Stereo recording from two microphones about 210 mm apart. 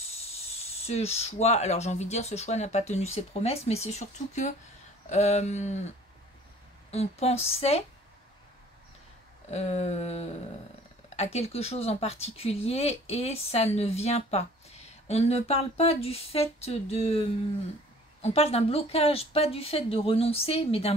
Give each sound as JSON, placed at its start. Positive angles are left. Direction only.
{"t": 0.0, "sound": "speech", "side_deg": 30}
{"t": 6.9, "sound": "speech", "side_deg": 30}
{"t": 9.5, "sound": "speech", "side_deg": 30}
{"t": 18.2, "sound": "speech", "side_deg": 30}